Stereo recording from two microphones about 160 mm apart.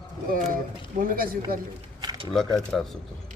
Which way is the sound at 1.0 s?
60° right (ahead or behind).